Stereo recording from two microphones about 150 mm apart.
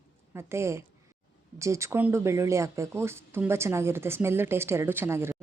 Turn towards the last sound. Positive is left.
turn(degrees=-15)  # may be behind; listen again after turning